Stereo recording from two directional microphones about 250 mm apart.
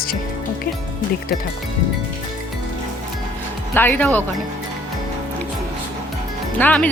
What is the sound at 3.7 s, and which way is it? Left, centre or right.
Speech, centre.